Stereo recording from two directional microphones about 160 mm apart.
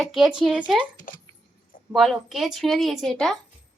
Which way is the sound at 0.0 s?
Centre (ahead or behind).